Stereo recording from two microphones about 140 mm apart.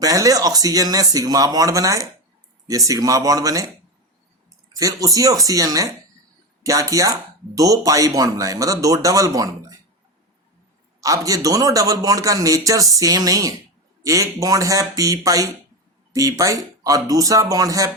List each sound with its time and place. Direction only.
0.0 s speech: 25° right (ahead or behind)
4.8 s speech: 25° right (ahead or behind)
11.0 s a man's voice: 25° right (ahead or behind)